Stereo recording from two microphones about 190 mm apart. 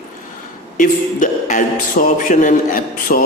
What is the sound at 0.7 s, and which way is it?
Speech, 45° left (ahead or behind).